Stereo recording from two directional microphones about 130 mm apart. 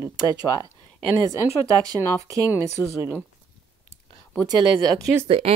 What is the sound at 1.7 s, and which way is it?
Speech, 25° right (ahead or behind).